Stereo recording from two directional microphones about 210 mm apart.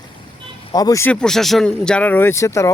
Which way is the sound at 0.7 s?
15° left (ahead or behind).